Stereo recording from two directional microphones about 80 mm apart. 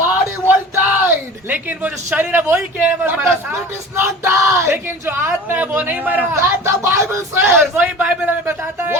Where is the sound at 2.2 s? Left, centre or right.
Right.